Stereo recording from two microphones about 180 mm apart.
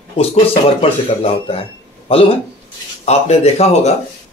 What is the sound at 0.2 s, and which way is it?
Speech, 35° left (ahead or behind).